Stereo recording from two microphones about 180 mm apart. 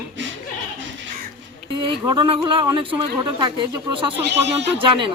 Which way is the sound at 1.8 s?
25° right (ahead or behind).